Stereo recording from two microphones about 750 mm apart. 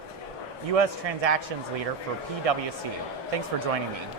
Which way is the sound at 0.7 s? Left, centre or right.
Right.